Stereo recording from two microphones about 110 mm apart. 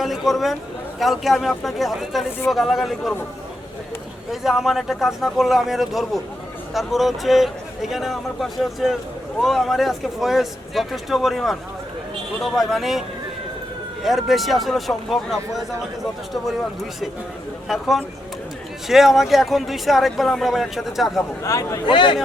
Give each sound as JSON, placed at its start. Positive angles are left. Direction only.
{"t": 0.0, "sound": "a sound", "side_deg": 0}
{"t": 0.9, "sound": "speech", "side_deg": 0}
{"t": 4.3, "sound": "speech", "side_deg": 0}
{"t": 17.7, "sound": "speech", "side_deg": 0}
{"t": 21.4, "sound": "speech", "side_deg": 30}
{"t": 21.8, "sound": "speech", "side_deg": 50}